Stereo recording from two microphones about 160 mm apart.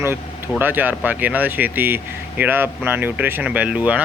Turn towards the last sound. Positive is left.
turn(degrees=-5)  # may be behind; listen again after turning